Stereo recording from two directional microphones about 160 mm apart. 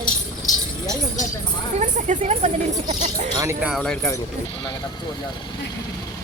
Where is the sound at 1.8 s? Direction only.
50° right (ahead or behind).